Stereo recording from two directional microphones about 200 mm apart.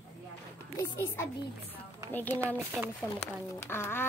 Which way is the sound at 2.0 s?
10° left (ahead or behind).